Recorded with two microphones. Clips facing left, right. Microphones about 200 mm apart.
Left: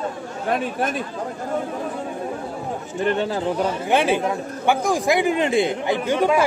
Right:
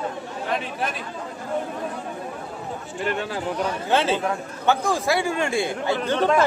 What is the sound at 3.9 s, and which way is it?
Speech, 15° left (ahead or behind).